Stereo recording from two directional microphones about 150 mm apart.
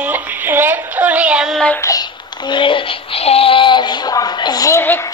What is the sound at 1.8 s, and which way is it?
Child singing, 25° left (ahead or behind).